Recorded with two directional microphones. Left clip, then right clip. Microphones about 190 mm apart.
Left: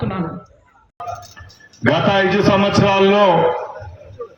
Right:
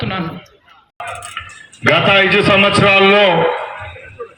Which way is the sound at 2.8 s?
50° left (ahead or behind).